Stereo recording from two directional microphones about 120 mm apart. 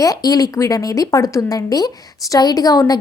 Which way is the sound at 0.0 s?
30° left (ahead or behind).